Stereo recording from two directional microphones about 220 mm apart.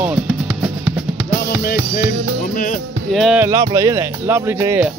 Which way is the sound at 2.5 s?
35° left (ahead or behind).